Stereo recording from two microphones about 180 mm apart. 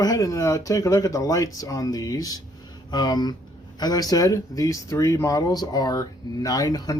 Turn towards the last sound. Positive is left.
turn(degrees=20)  # may be behind; listen again after turning